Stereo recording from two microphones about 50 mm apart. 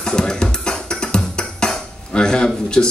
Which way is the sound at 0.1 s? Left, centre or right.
Centre.